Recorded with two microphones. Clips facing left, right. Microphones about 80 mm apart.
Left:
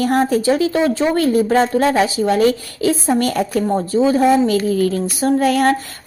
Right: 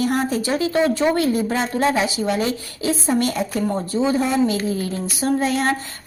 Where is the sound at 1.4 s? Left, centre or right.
Left.